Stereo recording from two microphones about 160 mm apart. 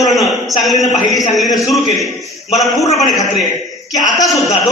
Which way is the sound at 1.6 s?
Centre (ahead or behind).